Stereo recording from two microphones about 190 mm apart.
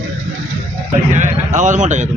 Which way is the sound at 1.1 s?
40° right (ahead or behind).